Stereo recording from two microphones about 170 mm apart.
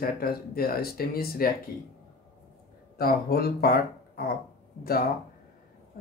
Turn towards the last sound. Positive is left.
turn(degrees=60)  # may be behind; listen again after turning